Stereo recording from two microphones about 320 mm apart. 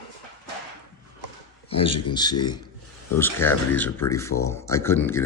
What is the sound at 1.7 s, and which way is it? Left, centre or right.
Speech, centre.